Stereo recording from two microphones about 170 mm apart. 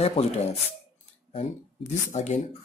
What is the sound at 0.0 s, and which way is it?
Speech, 40° left (ahead or behind).